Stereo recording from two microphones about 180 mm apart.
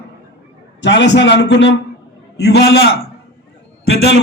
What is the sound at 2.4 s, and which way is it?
Speech, 65° left (ahead or behind).